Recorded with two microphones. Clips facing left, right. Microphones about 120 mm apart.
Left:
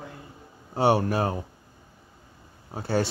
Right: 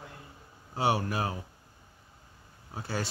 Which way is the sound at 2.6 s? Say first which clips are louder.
Left 9 dB; 30° left (ahead or behind).